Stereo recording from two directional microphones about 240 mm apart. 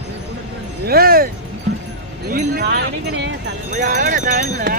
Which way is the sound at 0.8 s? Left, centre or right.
Right.